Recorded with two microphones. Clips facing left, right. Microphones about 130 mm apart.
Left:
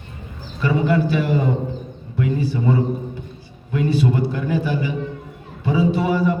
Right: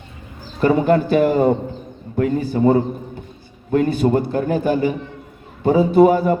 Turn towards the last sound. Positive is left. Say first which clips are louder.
# right 6 dB
turn(degrees=-50)  # may be behind; listen again after turning